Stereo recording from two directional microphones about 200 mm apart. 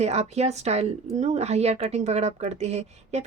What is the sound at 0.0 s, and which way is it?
Speech, 30° right (ahead or behind).